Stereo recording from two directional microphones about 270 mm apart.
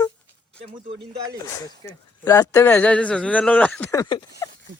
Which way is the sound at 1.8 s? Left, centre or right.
Centre.